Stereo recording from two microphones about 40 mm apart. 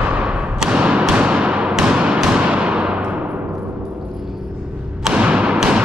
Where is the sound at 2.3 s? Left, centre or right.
Right.